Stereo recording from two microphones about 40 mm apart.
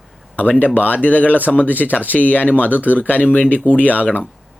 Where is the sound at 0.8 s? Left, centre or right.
Left.